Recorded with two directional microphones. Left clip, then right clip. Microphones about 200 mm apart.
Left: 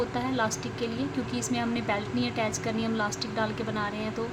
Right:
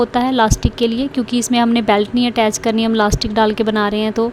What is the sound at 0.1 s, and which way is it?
A woman's voice, 50° right (ahead or behind).